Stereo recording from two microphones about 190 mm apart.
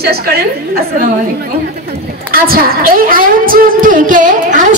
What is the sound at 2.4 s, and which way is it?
A woman's voice, 50° right (ahead or behind).